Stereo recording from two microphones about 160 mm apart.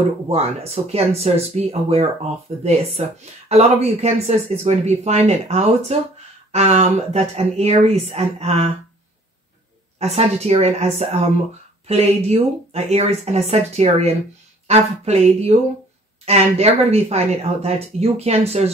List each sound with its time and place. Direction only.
0.3 s speech: 40° right (ahead or behind)
9.9 s speech: 40° right (ahead or behind)